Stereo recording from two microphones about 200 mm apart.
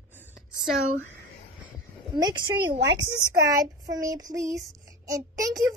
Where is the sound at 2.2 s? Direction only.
20° right (ahead or behind).